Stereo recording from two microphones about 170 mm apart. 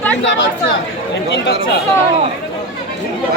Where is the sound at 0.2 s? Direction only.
90° left.